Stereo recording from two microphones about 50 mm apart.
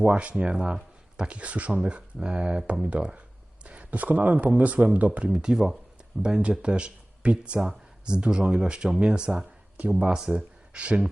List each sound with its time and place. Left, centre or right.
0.0 s speech: right
5.3 s speech: centre
10.0 s speech: centre
10.8 s speech: right